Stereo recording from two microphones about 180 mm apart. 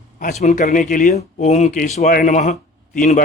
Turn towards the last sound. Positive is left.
turn(degrees=45)  # may be behind; listen again after turning